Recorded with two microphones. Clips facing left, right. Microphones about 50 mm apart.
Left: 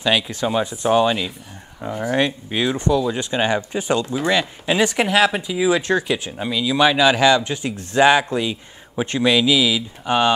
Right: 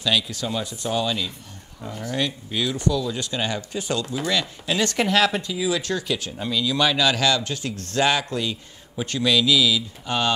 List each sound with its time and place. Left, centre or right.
0.0 s speech: left; by 5.5 s centre
5.5 s speech: left